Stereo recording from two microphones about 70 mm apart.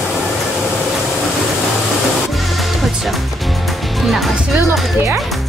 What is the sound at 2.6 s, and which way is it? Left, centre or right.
Music, centre.